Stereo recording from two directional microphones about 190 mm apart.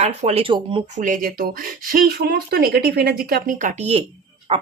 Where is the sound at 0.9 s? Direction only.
45° right (ahead or behind).